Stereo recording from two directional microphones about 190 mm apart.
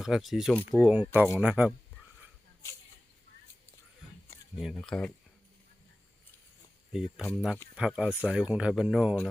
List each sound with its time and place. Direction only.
0.0 s speech: centre (ahead or behind)
0.8 s speech: 10° right (ahead or behind)
4.5 s speech: centre (ahead or behind)
6.9 s speech: 5° right (ahead or behind)